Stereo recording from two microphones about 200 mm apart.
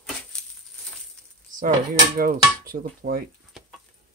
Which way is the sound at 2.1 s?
45° right (ahead or behind).